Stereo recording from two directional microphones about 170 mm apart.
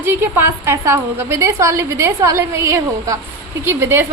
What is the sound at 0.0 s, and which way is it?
A woman's voice, 15° right (ahead or behind).